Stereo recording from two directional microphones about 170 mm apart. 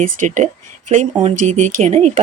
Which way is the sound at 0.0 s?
50° right (ahead or behind).